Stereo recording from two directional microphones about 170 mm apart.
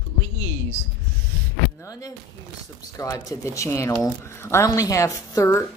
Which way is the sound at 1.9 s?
20° left (ahead or behind).